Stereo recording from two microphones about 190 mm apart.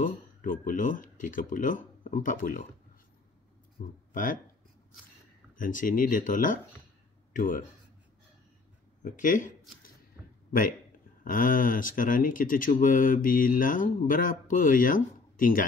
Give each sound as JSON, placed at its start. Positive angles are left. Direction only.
{"t": 0.0, "sound": "speech", "side_deg": 45}
{"t": 3.8, "sound": "speech", "side_deg": 45}
{"t": 5.6, "sound": "speech", "side_deg": 45}
{"t": 9.0, "sound": "speech", "side_deg": 45}
{"t": 11.2, "sound": "speech", "side_deg": 45}